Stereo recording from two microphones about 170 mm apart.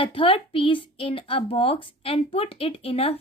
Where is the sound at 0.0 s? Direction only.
30° left (ahead or behind).